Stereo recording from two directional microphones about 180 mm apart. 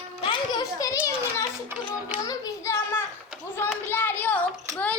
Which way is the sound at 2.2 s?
20° left (ahead or behind).